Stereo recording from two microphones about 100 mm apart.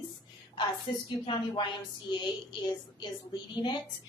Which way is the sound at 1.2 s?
55° left (ahead or behind).